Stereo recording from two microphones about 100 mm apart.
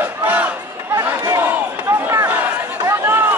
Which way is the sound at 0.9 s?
35° right (ahead or behind).